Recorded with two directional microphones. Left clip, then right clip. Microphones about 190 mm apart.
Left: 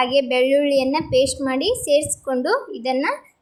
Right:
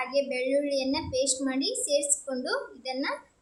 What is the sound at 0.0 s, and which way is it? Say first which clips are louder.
A woman's voice: left 11 dB; 30° left (ahead or behind).